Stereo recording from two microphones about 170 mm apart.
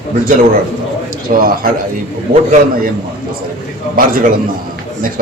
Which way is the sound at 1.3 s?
55° right (ahead or behind).